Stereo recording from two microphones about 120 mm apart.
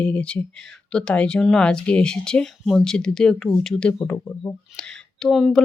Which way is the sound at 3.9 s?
20° left (ahead or behind).